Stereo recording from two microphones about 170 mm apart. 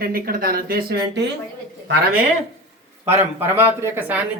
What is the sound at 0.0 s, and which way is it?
Speech, 60° right (ahead or behind).